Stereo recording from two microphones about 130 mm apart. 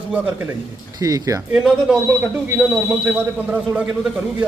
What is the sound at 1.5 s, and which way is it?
A man's voice, 5° right (ahead or behind).